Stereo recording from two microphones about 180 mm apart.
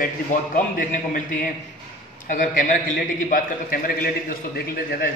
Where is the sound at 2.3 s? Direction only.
45° left (ahead or behind).